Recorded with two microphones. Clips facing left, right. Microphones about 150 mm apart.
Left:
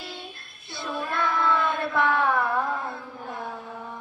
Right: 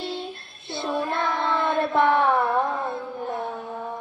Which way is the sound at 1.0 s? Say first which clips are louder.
Right 1 dB; 30° right (ahead or behind).